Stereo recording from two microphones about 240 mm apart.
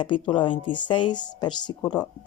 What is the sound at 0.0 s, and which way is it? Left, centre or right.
Speech, left.